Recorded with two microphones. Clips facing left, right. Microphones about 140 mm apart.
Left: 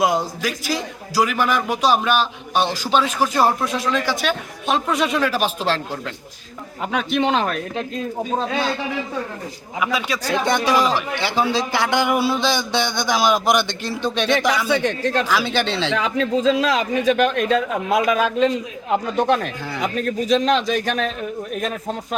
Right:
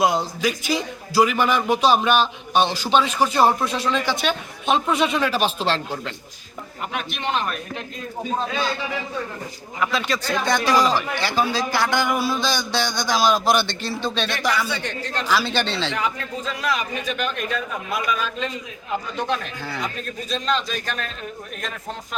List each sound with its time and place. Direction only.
0.0 s a man's voice: 5° left (ahead or behind)
7.3 s speech: 90° left
9.8 s speech: 10° left (ahead or behind)
10.4 s speech: 20° left (ahead or behind)
14.7 s speech: 90° left
15.3 s speech: 10° left (ahead or behind)
16.0 s a man's voice: 90° left; by 19.5 s 60° left (ahead or behind)
19.8 s a man's voice: 80° left